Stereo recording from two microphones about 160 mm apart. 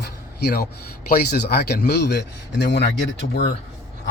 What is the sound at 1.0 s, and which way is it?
Speech, 70° left (ahead or behind).